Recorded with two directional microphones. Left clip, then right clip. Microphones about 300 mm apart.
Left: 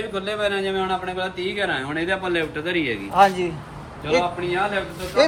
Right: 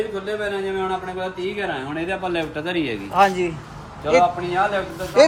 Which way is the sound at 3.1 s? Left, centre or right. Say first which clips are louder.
Even; centre.